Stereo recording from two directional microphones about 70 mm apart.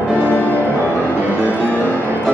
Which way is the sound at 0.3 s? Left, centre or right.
Left.